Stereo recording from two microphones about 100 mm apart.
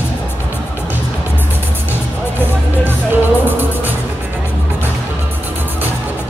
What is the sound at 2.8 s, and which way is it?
Music, 20° right (ahead or behind).